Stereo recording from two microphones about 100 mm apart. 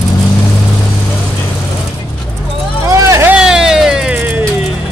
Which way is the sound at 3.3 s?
5° right (ahead or behind).